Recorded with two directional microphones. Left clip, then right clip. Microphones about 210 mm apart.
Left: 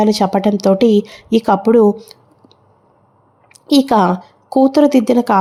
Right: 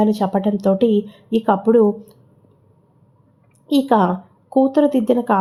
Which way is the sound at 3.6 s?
25° left (ahead or behind).